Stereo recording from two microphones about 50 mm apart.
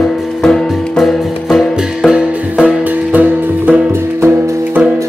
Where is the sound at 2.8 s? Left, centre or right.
Right.